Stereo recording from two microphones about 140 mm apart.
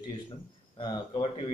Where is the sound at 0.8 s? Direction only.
45° left (ahead or behind).